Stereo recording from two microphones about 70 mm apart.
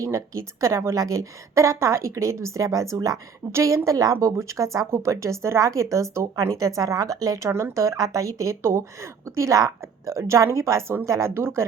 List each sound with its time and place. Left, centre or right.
0.0 s speech: right